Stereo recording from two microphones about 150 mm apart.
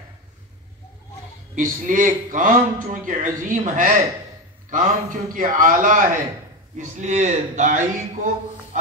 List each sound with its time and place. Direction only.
1.5 s a man's voice: 60° right (ahead or behind)